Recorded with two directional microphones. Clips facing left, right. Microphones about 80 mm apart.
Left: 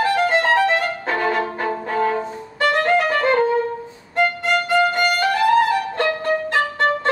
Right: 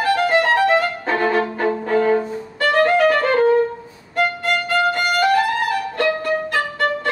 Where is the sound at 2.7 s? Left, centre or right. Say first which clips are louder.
Right 4 dB; left.